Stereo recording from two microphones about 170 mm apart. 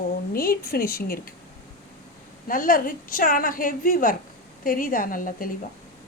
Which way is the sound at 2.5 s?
55° left (ahead or behind).